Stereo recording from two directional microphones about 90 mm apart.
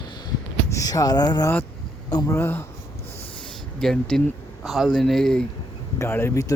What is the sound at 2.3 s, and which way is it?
Speech, 25° left (ahead or behind).